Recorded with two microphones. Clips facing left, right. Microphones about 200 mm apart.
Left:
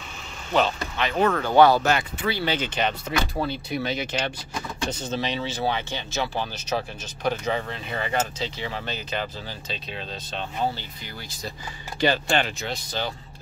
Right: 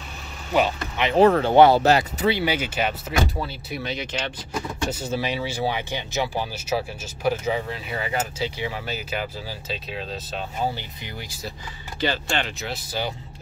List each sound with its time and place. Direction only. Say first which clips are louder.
0.5 s speech: right 1 dB; 10° right (ahead or behind)
1.1 s speech: right 5 dB; 30° right (ahead or behind)
2.2 s speech: right 4 dB; 20° right (ahead or behind)
2.5 s cutlery: even; 10° right (ahead or behind)
3.4 s speech: left 4 dB; centre (ahead or behind)
4.8 s cutlery: right 1 dB; 10° right (ahead or behind)
12.0 s speech: left 3 dB; 15° left (ahead or behind)
12.5 s speech: right 1 dB; 5° right (ahead or behind)